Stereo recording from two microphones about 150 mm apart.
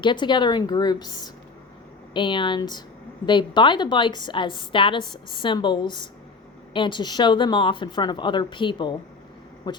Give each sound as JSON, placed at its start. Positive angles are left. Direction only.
{"t": 0.0, "sound": "a woman's voice", "side_deg": 30}